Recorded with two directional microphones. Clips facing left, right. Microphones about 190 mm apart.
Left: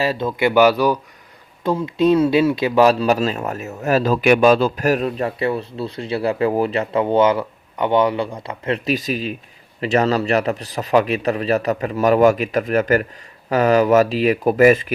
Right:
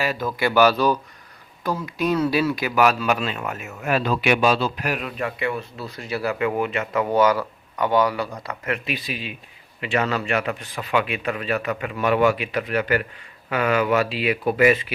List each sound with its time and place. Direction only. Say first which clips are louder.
0.0 s speech: left 5 dB; 30° left (ahead or behind)
1.6 s speech: left 7 dB; 25° left (ahead or behind); by 14.9 s 45° left (ahead or behind)